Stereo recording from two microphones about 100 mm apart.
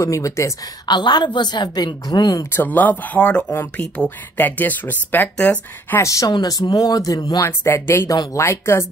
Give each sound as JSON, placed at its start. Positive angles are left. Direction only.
{"t": 0.0, "sound": "speech", "side_deg": 30}
{"t": 0.8, "sound": "a woman's voice", "side_deg": 50}
{"t": 2.5, "sound": "speech", "side_deg": 15}
{"t": 5.9, "sound": "speech", "side_deg": 30}
{"t": 6.3, "sound": "speech", "side_deg": 45}
{"t": 7.4, "sound": "speech", "side_deg": 25}